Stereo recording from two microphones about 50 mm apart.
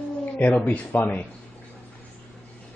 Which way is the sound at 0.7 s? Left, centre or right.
Left.